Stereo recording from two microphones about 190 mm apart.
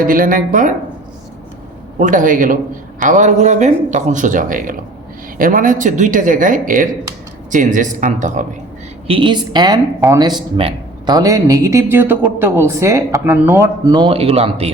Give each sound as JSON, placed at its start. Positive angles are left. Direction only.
{"t": 0.0, "sound": "speech", "side_deg": -45}
{"t": 2.0, "sound": "a man's voice", "side_deg": -45}
{"t": 9.0, "sound": "a woman's voice", "side_deg": -25}